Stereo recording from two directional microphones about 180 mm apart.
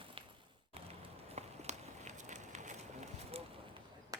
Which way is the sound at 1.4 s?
40° right (ahead or behind).